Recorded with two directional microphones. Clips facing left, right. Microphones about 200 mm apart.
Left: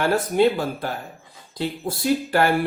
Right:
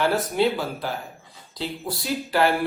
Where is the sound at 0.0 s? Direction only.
50° left (ahead or behind).